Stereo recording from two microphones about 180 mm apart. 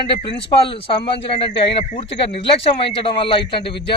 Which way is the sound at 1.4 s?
35° left (ahead or behind).